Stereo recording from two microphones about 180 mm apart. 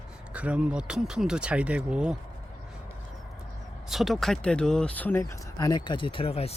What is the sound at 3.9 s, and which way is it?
Speech, centre (ahead or behind).